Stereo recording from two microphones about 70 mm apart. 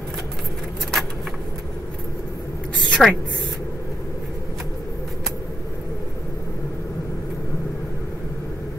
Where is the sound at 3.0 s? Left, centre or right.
Centre.